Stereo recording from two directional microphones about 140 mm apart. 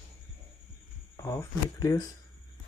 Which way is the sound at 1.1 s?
20° left (ahead or behind).